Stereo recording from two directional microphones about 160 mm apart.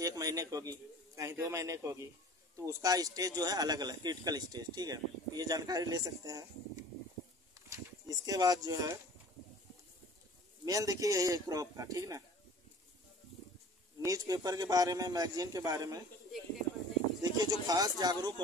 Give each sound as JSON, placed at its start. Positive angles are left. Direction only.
{"t": 0.0, "sound": "a man's voice", "side_deg": -20}
{"t": 7.5, "sound": "a sound", "side_deg": -20}
{"t": 10.6, "sound": "a man's voice", "side_deg": -20}
{"t": 14.0, "sound": "a man's voice", "side_deg": -20}
{"t": 17.2, "sound": "a man's voice", "side_deg": -25}